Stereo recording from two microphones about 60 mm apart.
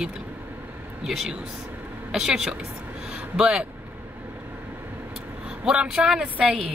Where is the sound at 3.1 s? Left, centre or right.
Centre.